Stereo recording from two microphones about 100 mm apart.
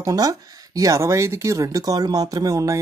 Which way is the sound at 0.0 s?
35° right (ahead or behind).